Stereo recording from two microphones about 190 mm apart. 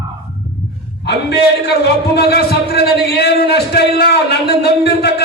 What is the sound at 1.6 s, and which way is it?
A man's voice, 60° left (ahead or behind).